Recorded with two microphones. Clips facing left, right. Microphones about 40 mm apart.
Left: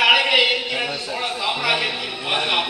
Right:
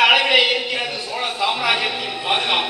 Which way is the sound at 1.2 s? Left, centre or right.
Centre.